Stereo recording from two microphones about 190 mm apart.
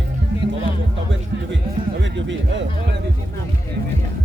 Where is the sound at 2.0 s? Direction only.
75° right (ahead or behind).